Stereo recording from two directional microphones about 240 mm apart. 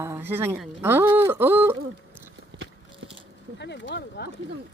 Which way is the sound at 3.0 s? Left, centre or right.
Right.